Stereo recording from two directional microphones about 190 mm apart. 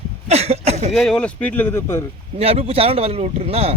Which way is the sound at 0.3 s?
35° right (ahead or behind).